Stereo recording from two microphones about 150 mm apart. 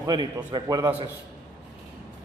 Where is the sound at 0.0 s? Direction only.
30° right (ahead or behind).